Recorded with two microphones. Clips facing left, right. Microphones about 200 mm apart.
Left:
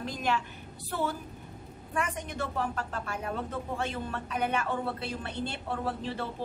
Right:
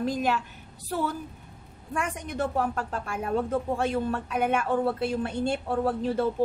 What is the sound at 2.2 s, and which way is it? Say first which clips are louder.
A man's voice: right 5 dB; 45° right (ahead or behind).